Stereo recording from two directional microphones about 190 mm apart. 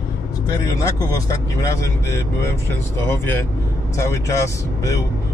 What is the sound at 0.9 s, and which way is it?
Speech, 20° left (ahead or behind).